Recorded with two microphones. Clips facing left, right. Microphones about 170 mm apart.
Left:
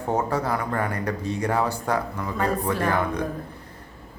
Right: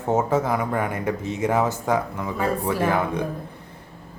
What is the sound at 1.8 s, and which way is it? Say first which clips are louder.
Speech: right 2 dB; 10° right (ahead or behind).